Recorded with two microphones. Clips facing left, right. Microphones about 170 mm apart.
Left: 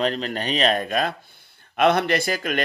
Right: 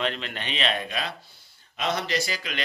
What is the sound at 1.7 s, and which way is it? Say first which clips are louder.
Speech: left 9 dB; 60° left (ahead or behind).